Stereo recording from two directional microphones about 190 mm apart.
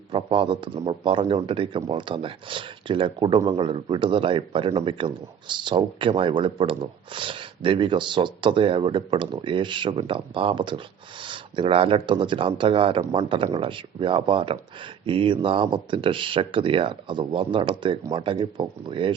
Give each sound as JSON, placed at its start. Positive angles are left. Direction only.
{"t": 0.1, "sound": "a man's voice", "side_deg": -25}